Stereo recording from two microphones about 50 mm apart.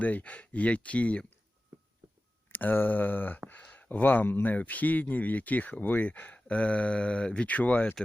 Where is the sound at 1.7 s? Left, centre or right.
Right.